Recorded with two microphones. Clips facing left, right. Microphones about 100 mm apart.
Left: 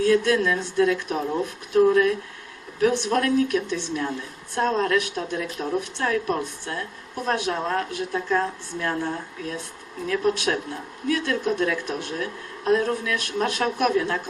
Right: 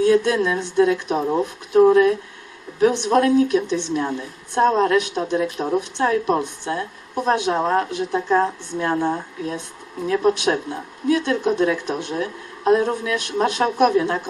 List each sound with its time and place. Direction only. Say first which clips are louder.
0.0 s a woman's voice: right 3 dB; 20° right (ahead or behind)